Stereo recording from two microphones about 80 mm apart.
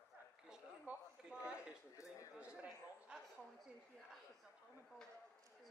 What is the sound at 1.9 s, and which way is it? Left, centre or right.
Speech, left.